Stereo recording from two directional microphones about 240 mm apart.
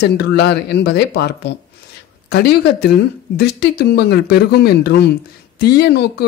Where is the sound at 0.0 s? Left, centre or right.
Left.